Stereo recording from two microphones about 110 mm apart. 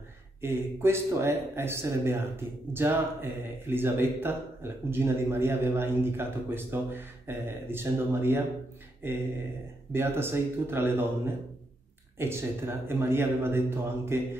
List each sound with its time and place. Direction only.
0.4 s speech: 20° right (ahead or behind)